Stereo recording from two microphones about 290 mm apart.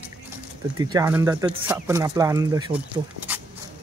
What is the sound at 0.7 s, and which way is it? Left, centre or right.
Speech, centre.